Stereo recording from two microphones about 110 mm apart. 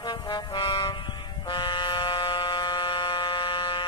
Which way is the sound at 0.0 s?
40° left (ahead or behind).